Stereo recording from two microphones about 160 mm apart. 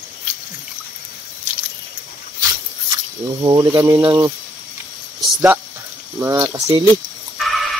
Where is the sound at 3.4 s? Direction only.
25° right (ahead or behind).